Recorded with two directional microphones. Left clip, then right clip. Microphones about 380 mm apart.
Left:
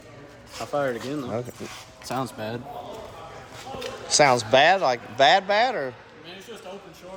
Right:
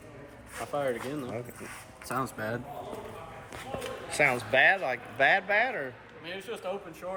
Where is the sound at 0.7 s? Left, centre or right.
Left.